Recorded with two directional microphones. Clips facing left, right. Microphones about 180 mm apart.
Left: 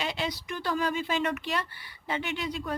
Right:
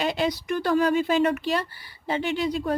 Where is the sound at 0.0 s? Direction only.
45° right (ahead or behind).